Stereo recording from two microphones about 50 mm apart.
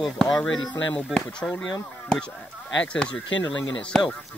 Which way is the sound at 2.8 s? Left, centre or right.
Left.